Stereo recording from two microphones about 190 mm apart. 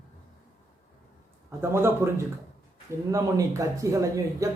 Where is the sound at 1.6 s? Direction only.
15° right (ahead or behind).